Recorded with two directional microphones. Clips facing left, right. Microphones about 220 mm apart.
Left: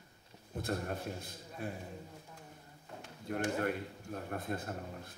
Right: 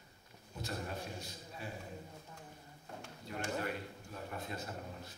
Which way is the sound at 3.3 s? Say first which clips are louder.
Left 5 dB; 50° left (ahead or behind).